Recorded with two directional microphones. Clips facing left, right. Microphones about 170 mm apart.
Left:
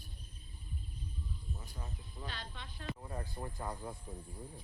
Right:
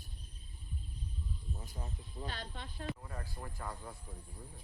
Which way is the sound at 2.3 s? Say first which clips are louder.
Right 2 dB; 45° right (ahead or behind).